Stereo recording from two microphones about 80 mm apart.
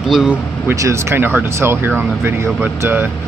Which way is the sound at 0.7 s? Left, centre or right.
Right.